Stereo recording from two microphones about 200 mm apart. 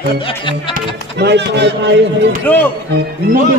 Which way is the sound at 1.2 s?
60° right (ahead or behind).